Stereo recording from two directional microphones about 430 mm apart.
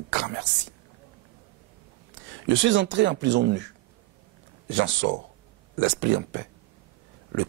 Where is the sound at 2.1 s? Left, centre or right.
Right.